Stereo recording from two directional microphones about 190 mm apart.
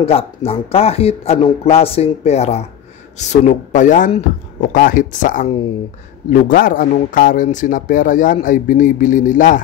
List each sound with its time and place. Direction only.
0.0 s a man's voice: 30° left (ahead or behind)